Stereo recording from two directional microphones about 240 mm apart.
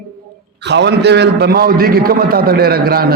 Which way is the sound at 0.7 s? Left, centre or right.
Right.